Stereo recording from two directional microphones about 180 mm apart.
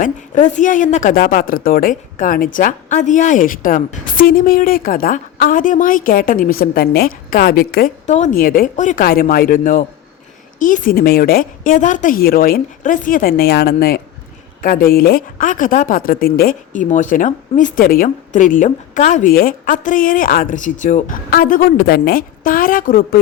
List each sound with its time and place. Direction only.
0.0 s speech: 45° left (ahead or behind)
8.0 s speech: 40° left (ahead or behind)